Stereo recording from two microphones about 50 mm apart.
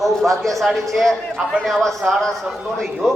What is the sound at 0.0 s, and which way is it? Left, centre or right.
A man's voice, centre.